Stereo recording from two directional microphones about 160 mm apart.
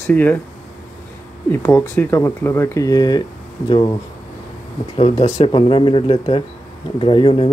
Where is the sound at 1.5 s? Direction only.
15° left (ahead or behind).